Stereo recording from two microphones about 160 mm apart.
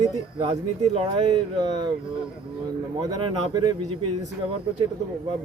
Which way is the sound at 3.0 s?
25° right (ahead or behind).